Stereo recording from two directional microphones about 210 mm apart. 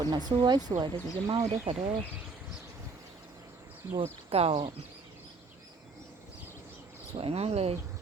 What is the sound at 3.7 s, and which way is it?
Insect, 10° right (ahead or behind).